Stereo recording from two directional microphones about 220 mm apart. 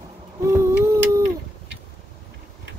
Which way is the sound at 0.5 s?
15° right (ahead or behind).